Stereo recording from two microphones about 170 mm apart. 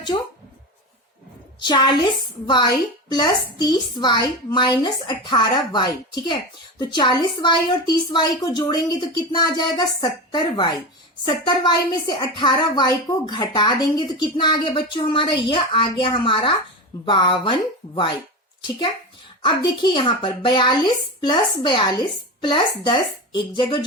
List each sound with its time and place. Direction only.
0.1 s a woman's voice: 25° left (ahead or behind)
1.5 s a woman's voice: 25° left (ahead or behind)
3.1 s a woman's voice: 25° left (ahead or behind)
19.8 s a woman's voice: 30° left (ahead or behind)